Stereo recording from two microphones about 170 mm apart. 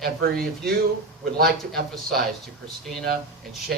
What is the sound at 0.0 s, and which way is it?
Speech, 65° right (ahead or behind).